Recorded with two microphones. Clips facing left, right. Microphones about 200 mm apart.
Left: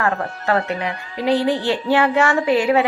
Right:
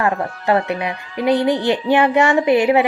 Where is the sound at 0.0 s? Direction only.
15° right (ahead or behind).